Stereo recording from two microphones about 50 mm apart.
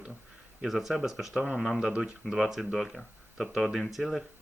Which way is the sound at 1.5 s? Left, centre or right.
Centre.